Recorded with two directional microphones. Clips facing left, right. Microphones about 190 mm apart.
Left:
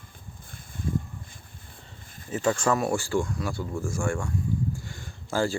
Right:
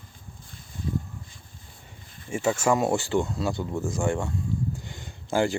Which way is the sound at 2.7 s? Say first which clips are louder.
Right 2 dB; 20° right (ahead or behind).